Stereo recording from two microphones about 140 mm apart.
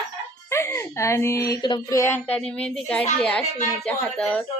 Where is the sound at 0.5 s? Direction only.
20° left (ahead or behind).